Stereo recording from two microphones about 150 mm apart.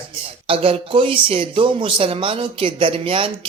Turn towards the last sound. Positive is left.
turn(degrees=-35)  # may be behind; listen again after turning